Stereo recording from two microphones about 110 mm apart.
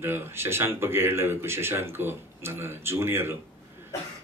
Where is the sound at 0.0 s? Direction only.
20° right (ahead or behind).